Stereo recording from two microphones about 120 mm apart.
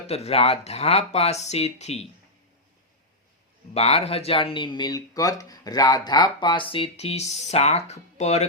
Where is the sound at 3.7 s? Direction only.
60° left (ahead or behind).